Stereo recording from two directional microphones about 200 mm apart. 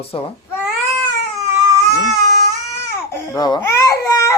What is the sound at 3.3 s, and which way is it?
Babbling, 20° left (ahead or behind).